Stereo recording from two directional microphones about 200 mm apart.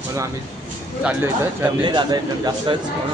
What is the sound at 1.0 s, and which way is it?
Speech, 5° right (ahead or behind).